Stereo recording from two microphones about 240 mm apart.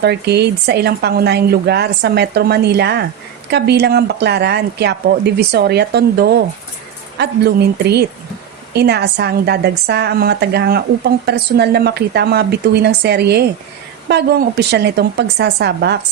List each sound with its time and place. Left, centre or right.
0.0 s a woman's voice: right